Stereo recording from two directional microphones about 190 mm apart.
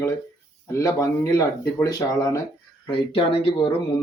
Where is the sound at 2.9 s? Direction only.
30° left (ahead or behind).